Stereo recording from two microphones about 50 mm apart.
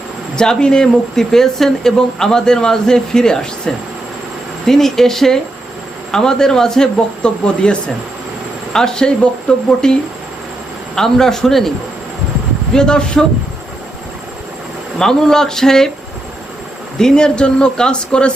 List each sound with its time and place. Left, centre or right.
0.3 s speech: centre
12.7 s speech: centre
14.9 s speech: centre
17.0 s speech: centre